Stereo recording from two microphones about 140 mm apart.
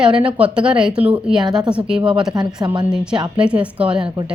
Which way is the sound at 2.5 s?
30° right (ahead or behind).